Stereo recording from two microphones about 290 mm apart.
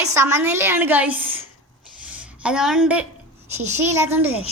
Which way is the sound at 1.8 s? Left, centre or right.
Centre.